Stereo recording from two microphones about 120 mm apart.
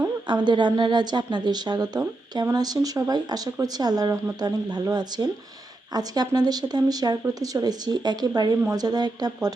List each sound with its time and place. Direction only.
0.4 s speech: 40° right (ahead or behind)